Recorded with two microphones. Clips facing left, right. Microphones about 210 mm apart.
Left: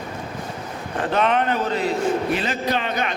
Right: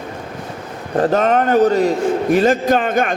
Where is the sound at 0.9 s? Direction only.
40° right (ahead or behind).